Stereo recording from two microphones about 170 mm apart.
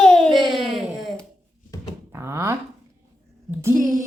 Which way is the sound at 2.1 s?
15° right (ahead or behind).